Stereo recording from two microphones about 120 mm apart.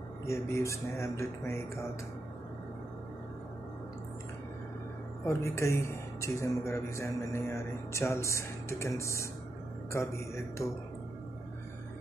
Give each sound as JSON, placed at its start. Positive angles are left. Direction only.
{"t": 0.3, "sound": "speech", "side_deg": 25}
{"t": 5.2, "sound": "speech", "side_deg": 25}